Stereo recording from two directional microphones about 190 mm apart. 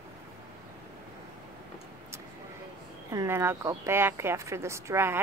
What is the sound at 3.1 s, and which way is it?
Speech, 15° right (ahead or behind).